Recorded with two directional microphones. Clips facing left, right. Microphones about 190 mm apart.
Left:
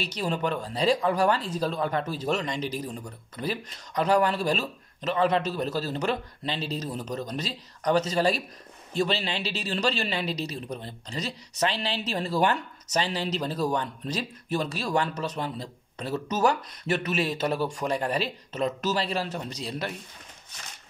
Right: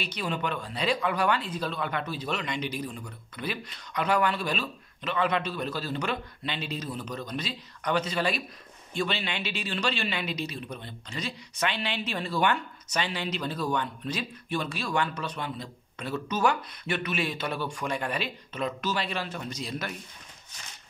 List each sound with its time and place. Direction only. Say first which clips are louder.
0.0 s speech: left 3 dB; 35° left (ahead or behind)